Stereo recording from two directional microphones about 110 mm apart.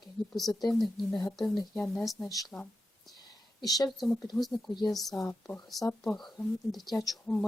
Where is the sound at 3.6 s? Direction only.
35° left (ahead or behind).